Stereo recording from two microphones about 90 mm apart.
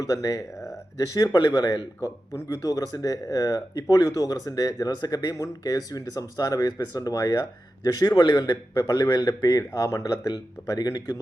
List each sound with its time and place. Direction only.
0.0 s a man's voice: 40° left (ahead or behind); by 8.5 s 55° left (ahead or behind)
8.7 s a man's voice: 35° left (ahead or behind)